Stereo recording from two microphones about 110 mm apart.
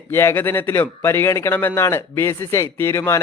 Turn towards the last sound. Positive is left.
turn(degrees=25)  # may be behind; listen again after turning